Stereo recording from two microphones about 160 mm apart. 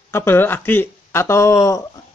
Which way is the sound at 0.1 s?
15° left (ahead or behind).